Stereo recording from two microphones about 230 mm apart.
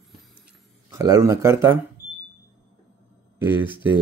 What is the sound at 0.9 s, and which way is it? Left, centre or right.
Speech, centre.